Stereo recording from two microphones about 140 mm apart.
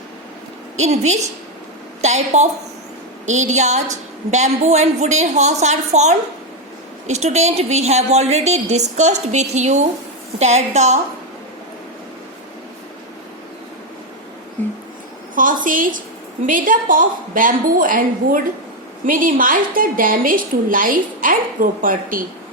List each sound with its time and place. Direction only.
0.8 s a woman's voice: 55° right (ahead or behind)
14.6 s a sound: 10° left (ahead or behind)
15.4 s a woman's voice: 75° right (ahead or behind)